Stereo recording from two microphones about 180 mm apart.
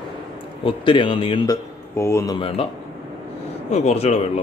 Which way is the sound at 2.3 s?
30° left (ahead or behind).